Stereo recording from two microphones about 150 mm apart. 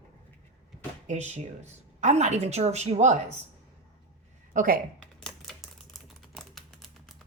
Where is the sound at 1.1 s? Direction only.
50° right (ahead or behind).